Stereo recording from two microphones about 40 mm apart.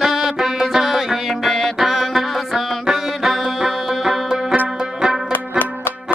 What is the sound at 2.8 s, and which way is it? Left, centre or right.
Music, centre.